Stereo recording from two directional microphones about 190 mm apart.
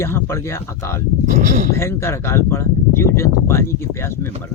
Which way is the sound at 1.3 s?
40° right (ahead or behind).